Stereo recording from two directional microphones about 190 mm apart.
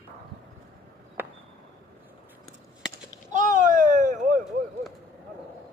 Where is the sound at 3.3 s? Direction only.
40° right (ahead or behind).